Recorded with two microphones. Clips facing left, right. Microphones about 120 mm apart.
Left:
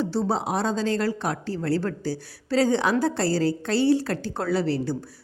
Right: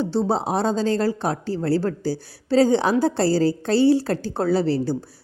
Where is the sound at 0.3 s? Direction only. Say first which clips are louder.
Right 3 dB; 30° right (ahead or behind).